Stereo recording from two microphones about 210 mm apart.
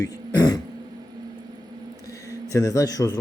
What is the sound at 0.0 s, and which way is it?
Throat clearing, 20° left (ahead or behind).